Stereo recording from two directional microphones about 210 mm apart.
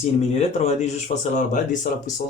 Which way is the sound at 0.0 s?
30° left (ahead or behind).